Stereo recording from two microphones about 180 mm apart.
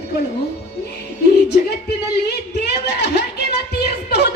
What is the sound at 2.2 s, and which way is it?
A woman's voice, 65° left (ahead or behind).